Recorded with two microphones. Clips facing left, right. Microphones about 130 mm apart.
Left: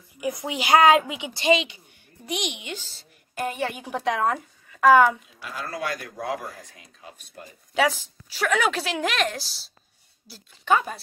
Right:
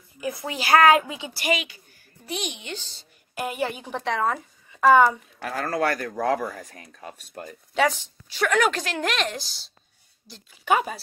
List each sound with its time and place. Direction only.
0.2 s a woman's voice: 20° left (ahead or behind)
3.3 s a woman's voice: 5° right (ahead or behind)
3.7 s a woman's voice: 10° left (ahead or behind)
4.2 s speech: centre (ahead or behind)
5.7 s speech: 55° right (ahead or behind)
7.7 s a woman's voice: 5° left (ahead or behind)